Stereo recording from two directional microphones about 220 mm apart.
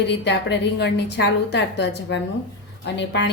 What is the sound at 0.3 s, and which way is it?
A woman's voice, 50° left (ahead or behind).